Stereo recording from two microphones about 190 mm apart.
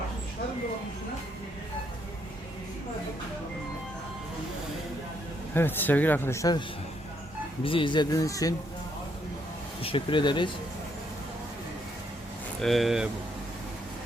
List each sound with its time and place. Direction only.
5.5 s speech: 10° left (ahead or behind)
7.6 s speech: 25° left (ahead or behind)
9.8 s speech: 25° left (ahead or behind)
12.5 s speech: centre (ahead or behind)